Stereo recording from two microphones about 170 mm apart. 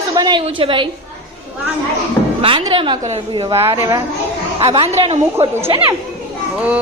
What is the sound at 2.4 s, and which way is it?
A woman's voice, 30° right (ahead or behind).